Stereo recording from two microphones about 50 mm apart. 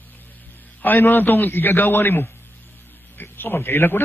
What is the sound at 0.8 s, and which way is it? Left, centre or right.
A man's voice, left.